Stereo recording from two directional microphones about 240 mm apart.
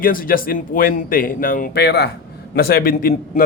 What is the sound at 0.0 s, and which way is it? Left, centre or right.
A man's voice, left.